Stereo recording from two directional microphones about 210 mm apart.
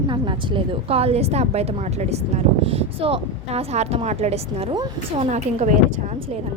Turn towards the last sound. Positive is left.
turn(degrees=-35)  # may be behind; listen again after turning